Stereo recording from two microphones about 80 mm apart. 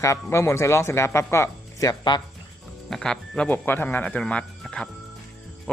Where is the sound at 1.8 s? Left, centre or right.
Left.